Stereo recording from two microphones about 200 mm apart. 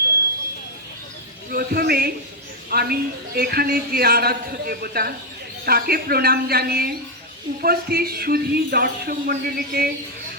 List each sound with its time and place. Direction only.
1.5 s a woman's voice: 50° right (ahead or behind)